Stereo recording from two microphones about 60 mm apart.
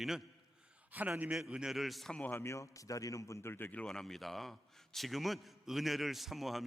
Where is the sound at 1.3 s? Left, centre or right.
Centre.